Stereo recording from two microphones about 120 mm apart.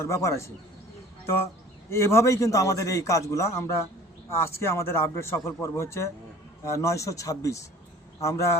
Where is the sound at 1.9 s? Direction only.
20° left (ahead or behind).